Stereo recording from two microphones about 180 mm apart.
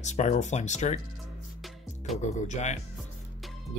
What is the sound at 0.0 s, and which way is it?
Speech, 40° left (ahead or behind).